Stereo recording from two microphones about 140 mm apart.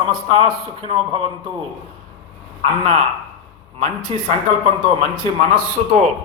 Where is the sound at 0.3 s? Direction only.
40° right (ahead or behind).